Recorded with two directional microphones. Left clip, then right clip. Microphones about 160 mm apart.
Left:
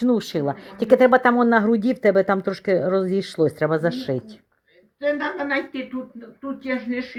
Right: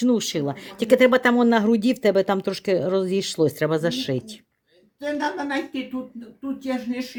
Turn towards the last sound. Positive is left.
turn(degrees=-30)  # may be behind; listen again after turning